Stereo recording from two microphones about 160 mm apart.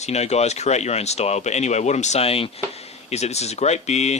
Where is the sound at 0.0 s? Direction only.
45° left (ahead or behind).